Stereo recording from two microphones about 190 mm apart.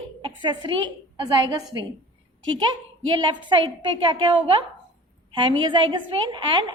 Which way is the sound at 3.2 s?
25° right (ahead or behind).